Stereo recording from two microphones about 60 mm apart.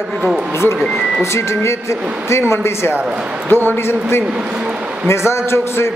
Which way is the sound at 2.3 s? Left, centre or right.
Left.